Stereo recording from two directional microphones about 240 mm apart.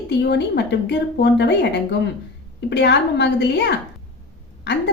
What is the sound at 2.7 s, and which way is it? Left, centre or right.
A woman's voice, left.